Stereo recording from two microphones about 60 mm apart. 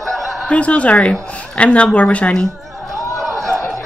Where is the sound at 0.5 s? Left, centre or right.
Left.